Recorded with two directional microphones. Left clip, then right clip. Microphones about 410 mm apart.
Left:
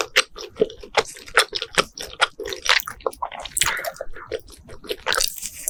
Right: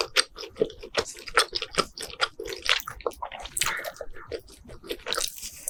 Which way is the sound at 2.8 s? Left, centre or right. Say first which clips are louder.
Left 5 dB; centre.